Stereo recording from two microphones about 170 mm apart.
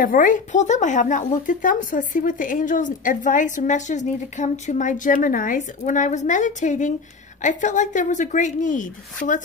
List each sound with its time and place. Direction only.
0.0 s speech: 50° left (ahead or behind)